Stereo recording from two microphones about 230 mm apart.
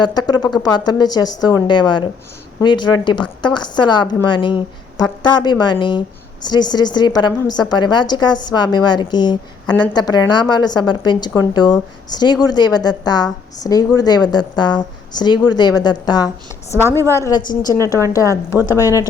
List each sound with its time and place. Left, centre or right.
0.0 s a woman's voice: centre